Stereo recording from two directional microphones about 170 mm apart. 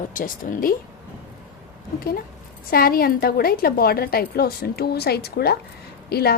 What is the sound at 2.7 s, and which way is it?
A woman's voice, 60° left (ahead or behind).